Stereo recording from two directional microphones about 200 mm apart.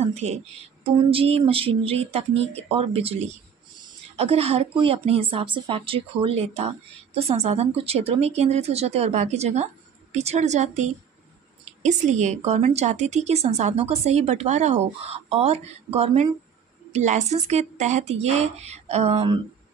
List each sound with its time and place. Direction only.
0.0 s a woman's voice: 35° right (ahead or behind)